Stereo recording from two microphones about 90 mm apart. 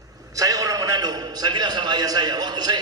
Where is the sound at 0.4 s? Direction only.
40° right (ahead or behind).